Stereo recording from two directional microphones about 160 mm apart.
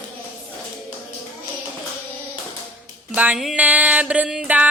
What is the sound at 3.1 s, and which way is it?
Music, 10° right (ahead or behind).